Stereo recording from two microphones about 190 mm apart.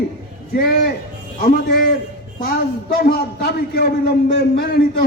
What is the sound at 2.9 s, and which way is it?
A man's voice, 55° left (ahead or behind).